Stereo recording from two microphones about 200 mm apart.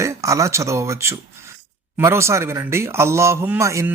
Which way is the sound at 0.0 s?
15° right (ahead or behind).